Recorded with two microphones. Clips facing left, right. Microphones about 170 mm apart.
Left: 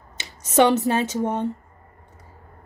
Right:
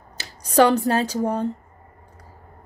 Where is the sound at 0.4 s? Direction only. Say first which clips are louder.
Right 1 dB; centre (ahead or behind).